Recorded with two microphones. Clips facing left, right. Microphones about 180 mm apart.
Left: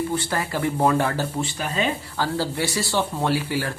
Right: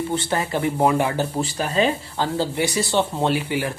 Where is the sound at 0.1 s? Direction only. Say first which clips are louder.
Right 2 dB; 25° right (ahead or behind).